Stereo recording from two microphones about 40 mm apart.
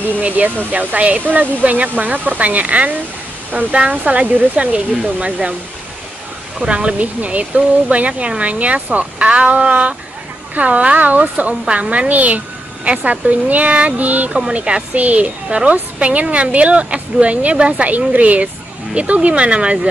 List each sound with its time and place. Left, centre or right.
0.7 s a woman's voice: right
6.6 s a woman's voice: right
17.9 s a woman's voice: right